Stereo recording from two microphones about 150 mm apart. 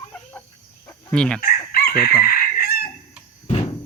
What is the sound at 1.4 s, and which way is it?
Chicken, 80° left.